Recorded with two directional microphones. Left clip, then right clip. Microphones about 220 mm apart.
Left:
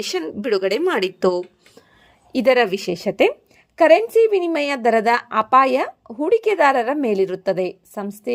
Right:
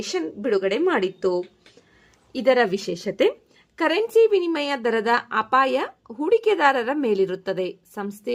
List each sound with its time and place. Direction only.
0.0 s a woman's voice: 45° left (ahead or behind)
2.3 s speech: 35° left (ahead or behind)